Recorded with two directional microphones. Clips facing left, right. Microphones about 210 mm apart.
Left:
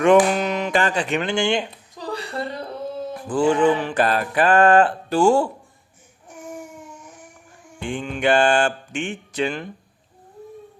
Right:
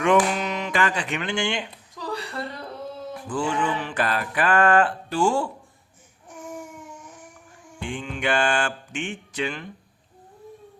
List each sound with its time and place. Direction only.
0.0 s music: 40° left (ahead or behind)
0.7 s music: 35° left (ahead or behind)
3.2 s music: 40° left (ahead or behind)
7.9 s mantra: 45° left (ahead or behind)
8.2 s music: 35° left (ahead or behind)